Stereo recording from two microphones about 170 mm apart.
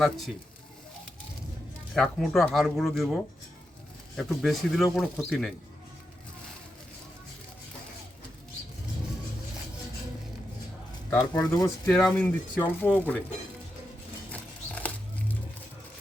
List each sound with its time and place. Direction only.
0.0 s speech: centre (ahead or behind)
1.9 s speech: 5° left (ahead or behind)
4.2 s speech: centre (ahead or behind)
11.1 s speech: 20° left (ahead or behind)
11.9 s speech: 10° left (ahead or behind)